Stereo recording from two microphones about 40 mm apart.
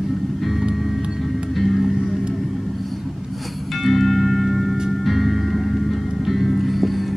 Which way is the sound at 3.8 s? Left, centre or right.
Centre.